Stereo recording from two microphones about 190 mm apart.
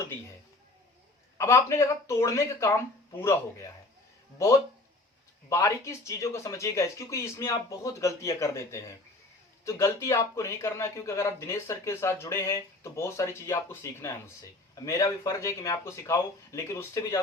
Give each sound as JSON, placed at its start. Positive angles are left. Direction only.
{"t": 1.4, "sound": "speech", "side_deg": 15}
{"t": 5.5, "sound": "speech", "side_deg": 15}